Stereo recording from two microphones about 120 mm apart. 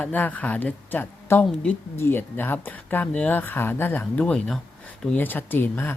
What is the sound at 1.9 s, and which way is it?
Speech, 20° left (ahead or behind).